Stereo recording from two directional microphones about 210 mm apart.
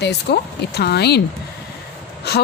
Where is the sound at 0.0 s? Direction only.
50° left (ahead or behind).